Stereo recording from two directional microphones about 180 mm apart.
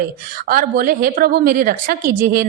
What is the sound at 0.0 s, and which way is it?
A woman's voice, 55° right (ahead or behind).